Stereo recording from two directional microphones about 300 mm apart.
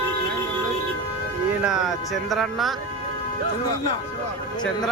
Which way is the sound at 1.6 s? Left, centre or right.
Centre.